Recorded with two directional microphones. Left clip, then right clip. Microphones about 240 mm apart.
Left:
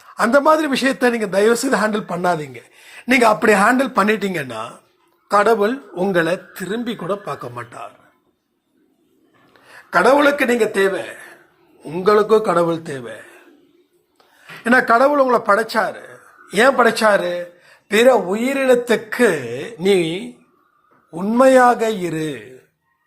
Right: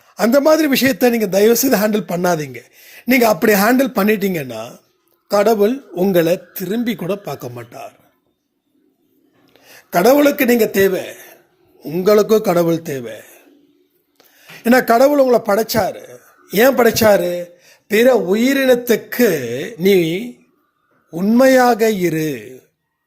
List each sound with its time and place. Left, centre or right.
0.1 s speech: right
9.5 s a man's voice: right